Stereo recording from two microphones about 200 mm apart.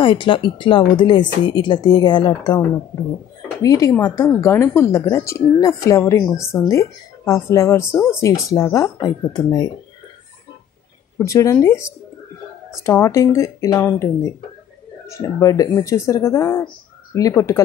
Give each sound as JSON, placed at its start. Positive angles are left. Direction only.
{"t": 0.0, "sound": "speech", "side_deg": 25}
{"t": 3.6, "sound": "speech", "side_deg": 15}
{"t": 11.1, "sound": "speech", "side_deg": 15}
{"t": 12.8, "sound": "speech", "side_deg": 15}
{"t": 15.0, "sound": "speech", "side_deg": 15}